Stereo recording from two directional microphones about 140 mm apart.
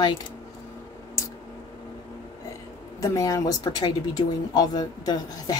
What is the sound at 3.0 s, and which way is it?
Speech, 25° left (ahead or behind).